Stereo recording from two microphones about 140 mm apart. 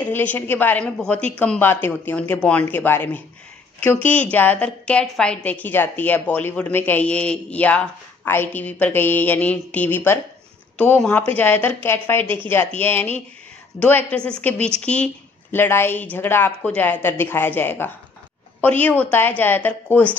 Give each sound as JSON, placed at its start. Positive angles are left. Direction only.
{"t": 0.0, "sound": "a woman's voice", "side_deg": 10}